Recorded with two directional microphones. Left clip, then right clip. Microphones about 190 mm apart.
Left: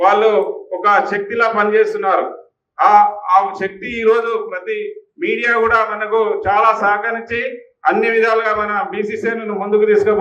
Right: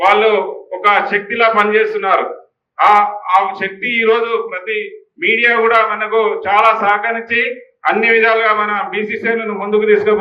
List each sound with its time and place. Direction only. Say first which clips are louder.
0.0 s a man's voice: right 1 dB; 90° left